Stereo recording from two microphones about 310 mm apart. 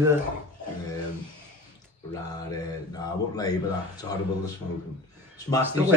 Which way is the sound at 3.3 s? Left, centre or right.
Centre.